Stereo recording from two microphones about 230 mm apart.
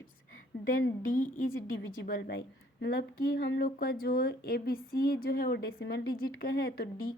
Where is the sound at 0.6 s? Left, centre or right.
Left.